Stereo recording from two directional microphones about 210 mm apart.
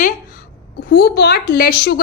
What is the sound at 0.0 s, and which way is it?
A woman's voice, 45° left (ahead or behind).